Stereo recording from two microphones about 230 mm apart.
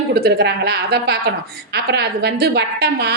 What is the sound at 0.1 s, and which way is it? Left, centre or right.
A woman's voice, right.